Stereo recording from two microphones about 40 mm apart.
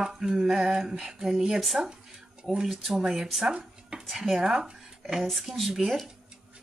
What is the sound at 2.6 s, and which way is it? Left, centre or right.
Speech, centre.